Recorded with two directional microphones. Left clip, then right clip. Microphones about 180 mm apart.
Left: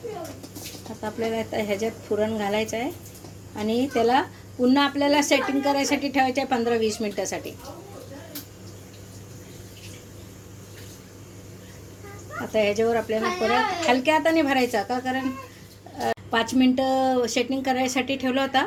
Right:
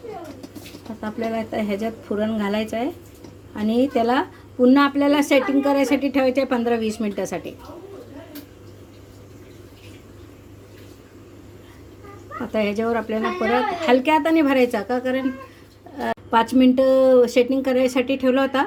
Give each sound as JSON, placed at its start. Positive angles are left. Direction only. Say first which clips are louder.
{"t": 1.0, "sound": "speech", "louder": "right 1 dB", "side_deg": -50}
{"t": 12.5, "sound": "speech", "louder": "left 1 dB", "side_deg": -50}